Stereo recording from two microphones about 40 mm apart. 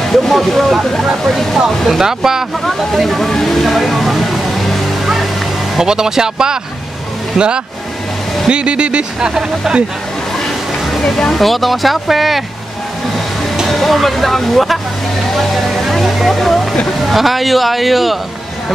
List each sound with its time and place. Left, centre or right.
0.1 s speech: centre
2.0 s speech: centre
2.6 s a sound: centre
5.8 s speech: centre
11.0 s speech: centre
11.3 s speech: centre
13.7 s speech: centre
15.3 s a sound: centre
17.0 s speech: centre